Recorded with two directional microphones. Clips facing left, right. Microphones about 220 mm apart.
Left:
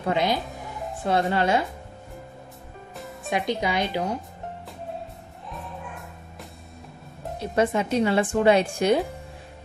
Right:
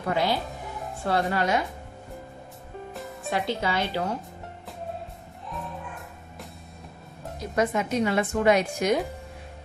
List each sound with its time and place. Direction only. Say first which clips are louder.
0.0 s speech: left 2 dB; 20° left (ahead or behind)
3.3 s speech: left 2 dB; 15° left (ahead or behind)
7.3 s speech: left 2 dB; 30° left (ahead or behind)